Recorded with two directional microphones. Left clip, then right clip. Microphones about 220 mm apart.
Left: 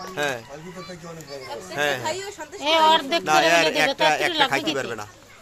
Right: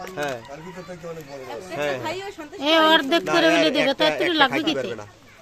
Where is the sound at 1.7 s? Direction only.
Centre (ahead or behind).